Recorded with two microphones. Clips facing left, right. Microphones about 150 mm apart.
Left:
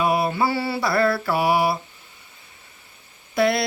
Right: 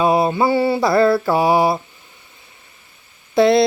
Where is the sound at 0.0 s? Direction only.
25° right (ahead or behind).